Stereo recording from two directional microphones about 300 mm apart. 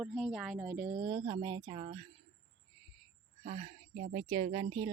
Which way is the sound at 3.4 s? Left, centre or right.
Right.